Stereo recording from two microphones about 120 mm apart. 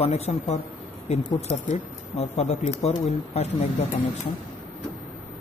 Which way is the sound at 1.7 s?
60° left (ahead or behind).